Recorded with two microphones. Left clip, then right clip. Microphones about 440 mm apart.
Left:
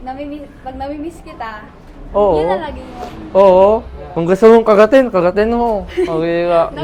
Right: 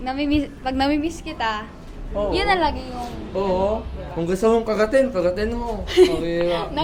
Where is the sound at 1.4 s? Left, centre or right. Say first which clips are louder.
Right 3 dB; right.